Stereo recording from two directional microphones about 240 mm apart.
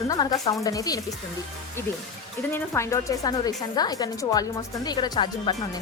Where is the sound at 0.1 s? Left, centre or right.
Centre.